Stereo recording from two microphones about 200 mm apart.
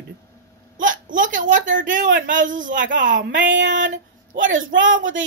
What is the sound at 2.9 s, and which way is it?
A woman's voice, 65° right (ahead or behind).